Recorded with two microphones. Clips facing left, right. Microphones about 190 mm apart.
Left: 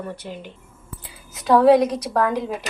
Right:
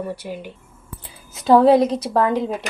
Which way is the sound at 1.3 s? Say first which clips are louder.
Right 1 dB; 25° right (ahead or behind).